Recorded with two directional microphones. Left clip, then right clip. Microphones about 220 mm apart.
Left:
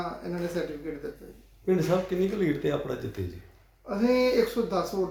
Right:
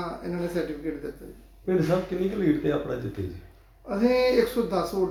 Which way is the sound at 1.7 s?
40° left (ahead or behind).